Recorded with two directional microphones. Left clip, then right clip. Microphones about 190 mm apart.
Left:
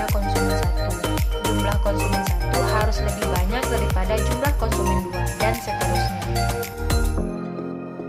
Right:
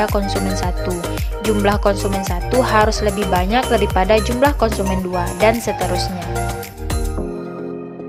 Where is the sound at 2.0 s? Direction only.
Centre (ahead or behind).